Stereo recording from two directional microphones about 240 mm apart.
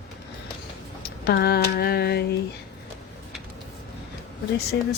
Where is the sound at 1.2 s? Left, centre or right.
Left.